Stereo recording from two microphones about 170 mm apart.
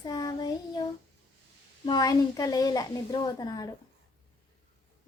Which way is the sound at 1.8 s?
25° left (ahead or behind).